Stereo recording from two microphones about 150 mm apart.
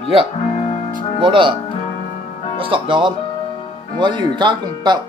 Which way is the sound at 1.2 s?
35° right (ahead or behind).